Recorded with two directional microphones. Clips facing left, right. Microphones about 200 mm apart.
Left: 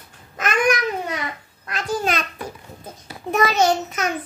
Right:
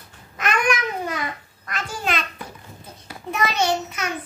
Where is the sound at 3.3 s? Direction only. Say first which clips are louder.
Left 5 dB; 45° left (ahead or behind).